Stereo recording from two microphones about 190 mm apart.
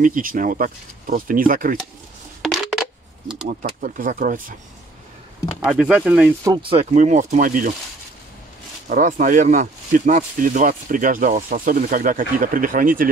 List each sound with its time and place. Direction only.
0.0 s speech: 45° right (ahead or behind)
2.4 s coin: centre (ahead or behind)
3.4 s speech: 45° right (ahead or behind)
5.7 s speech: 5° right (ahead or behind)
6.4 s speech: 25° right (ahead or behind); by 7.7 s 45° right (ahead or behind)
8.8 s speech: 45° right (ahead or behind)